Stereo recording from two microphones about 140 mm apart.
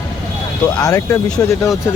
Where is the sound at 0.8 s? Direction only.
25° left (ahead or behind).